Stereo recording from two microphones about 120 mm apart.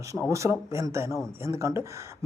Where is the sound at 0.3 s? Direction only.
25° right (ahead or behind).